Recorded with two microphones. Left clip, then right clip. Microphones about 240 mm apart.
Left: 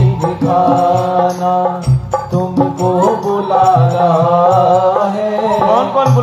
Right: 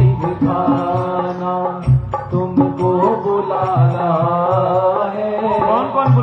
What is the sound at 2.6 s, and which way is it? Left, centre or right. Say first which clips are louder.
Music: left 2 dB; left.